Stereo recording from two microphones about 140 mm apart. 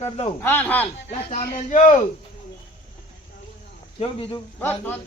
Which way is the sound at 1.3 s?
60° left (ahead or behind).